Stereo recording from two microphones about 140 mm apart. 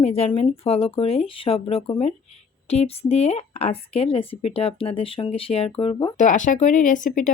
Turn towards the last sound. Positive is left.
turn(degrees=70)  # may be behind; listen again after turning